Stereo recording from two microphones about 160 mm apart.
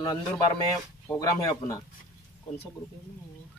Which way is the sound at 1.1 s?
20° left (ahead or behind).